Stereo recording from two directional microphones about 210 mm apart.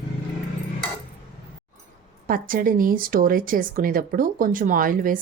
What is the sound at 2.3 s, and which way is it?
Speech, 40° right (ahead or behind).